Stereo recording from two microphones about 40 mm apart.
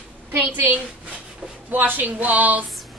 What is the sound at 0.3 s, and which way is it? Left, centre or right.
Speech, right.